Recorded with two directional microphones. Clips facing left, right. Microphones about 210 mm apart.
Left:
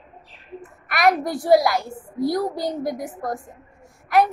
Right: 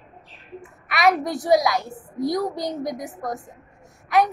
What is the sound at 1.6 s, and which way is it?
Speech, 20° right (ahead or behind).